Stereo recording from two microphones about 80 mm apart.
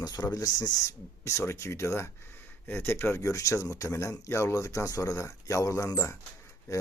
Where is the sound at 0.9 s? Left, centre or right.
Left.